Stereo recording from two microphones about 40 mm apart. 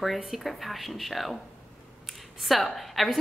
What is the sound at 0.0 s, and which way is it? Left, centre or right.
A woman's voice, centre.